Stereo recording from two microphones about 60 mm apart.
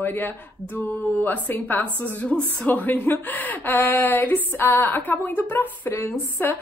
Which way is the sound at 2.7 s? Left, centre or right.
Left.